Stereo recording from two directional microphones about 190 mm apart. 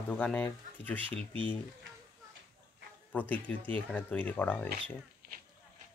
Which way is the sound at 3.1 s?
10° left (ahead or behind).